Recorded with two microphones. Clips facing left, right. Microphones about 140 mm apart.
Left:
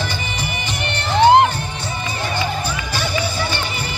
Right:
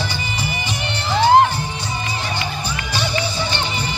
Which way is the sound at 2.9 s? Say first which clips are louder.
Right 1 dB; 20° right (ahead or behind).